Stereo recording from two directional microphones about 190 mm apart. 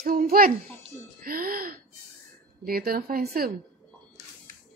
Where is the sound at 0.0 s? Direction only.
50° right (ahead or behind).